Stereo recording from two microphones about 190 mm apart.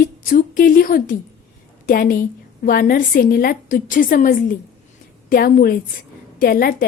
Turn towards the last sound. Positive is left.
turn(degrees=50)  # may be behind; listen again after turning